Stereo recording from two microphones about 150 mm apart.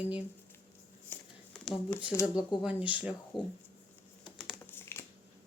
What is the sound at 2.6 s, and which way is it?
Speech, 10° right (ahead or behind).